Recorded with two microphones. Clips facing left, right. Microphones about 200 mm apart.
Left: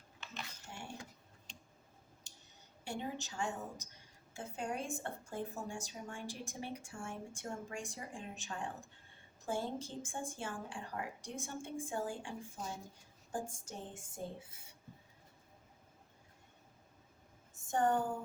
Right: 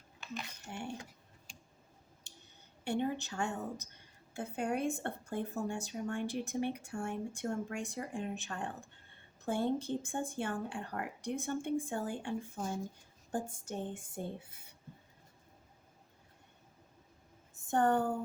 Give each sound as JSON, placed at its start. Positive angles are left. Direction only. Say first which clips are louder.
{"t": 2.8, "sound": "speech", "louder": "right 8 dB", "side_deg": -60}
{"t": 17.7, "sound": "speech", "louder": "right 3 dB", "side_deg": -60}